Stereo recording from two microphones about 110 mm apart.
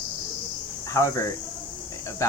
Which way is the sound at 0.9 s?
30° left (ahead or behind).